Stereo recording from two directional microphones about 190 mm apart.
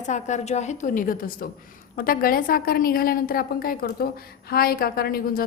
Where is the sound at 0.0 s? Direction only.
40° left (ahead or behind).